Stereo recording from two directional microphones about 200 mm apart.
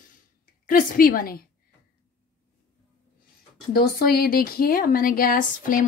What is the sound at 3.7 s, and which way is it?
Speech, 50° left (ahead or behind).